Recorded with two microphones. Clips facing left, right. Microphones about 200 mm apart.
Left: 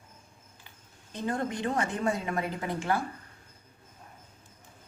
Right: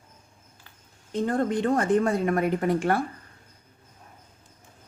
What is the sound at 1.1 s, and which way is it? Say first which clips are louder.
A woman's voice: right 7 dB; 55° right (ahead or behind).